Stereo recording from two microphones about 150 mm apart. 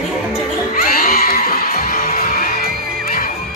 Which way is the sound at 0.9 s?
80° left.